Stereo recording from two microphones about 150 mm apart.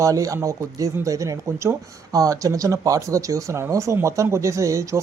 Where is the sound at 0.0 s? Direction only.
20° right (ahead or behind).